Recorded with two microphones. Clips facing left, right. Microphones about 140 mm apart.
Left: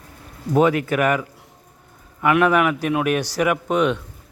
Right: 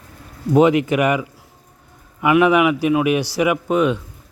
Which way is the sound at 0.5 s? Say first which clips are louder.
Right 3 dB; 15° right (ahead or behind).